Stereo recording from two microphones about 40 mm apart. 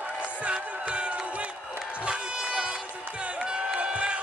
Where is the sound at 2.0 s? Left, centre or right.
Right.